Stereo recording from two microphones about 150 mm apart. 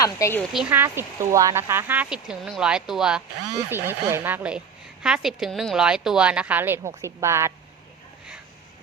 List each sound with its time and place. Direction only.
0.0 s a woman's voice: 20° left (ahead or behind)
0.5 s speech: 10° right (ahead or behind)
3.7 s a woman's voice: 15° right (ahead or behind)